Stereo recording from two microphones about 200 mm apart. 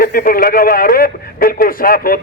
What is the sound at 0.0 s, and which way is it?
Speech, 45° left (ahead or behind).